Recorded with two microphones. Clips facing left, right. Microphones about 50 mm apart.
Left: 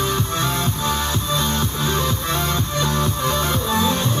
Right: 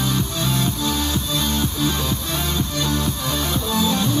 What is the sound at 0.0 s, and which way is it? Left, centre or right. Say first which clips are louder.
Music: left 2 dB; left.